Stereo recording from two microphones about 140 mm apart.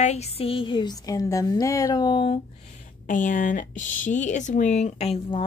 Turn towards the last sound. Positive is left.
turn(degrees=45)  # may be behind; listen again after turning